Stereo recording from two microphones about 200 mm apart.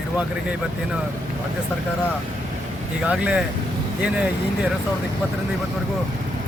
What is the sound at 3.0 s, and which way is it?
Speech, 5° right (ahead or behind).